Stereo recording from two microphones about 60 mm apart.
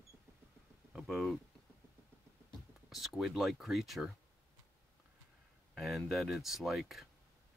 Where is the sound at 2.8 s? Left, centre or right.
Centre.